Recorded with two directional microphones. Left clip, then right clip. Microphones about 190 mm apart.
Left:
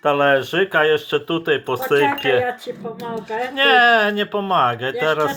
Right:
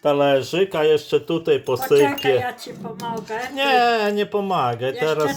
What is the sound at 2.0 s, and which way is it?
Speech, 50° right (ahead or behind).